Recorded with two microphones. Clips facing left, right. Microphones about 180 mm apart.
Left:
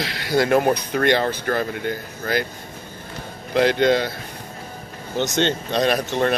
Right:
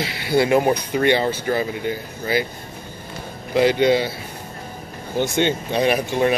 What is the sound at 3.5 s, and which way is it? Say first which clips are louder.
Speech: right 1 dB; 10° right (ahead or behind).